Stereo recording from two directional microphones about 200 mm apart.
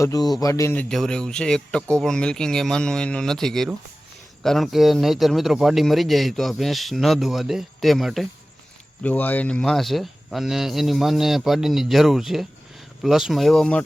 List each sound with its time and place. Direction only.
0.0 s speech: 15° left (ahead or behind)